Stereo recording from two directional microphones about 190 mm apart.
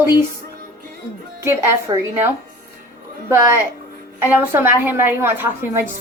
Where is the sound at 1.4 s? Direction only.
15° right (ahead or behind).